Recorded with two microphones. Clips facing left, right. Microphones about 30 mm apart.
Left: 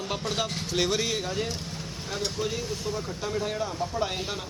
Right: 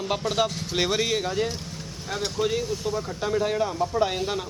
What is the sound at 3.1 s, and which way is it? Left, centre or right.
A man's voice, centre.